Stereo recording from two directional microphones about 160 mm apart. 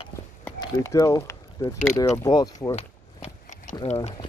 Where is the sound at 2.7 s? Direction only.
45° left (ahead or behind).